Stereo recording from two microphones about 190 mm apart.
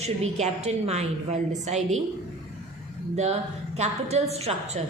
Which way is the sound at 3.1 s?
35° right (ahead or behind).